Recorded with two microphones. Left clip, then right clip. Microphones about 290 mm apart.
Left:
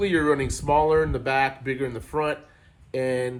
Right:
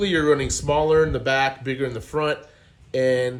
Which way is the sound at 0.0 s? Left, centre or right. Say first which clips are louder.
Right 2 dB; centre.